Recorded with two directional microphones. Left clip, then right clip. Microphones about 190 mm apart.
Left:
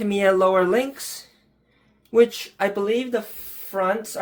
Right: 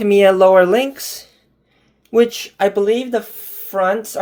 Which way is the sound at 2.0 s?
30° right (ahead or behind).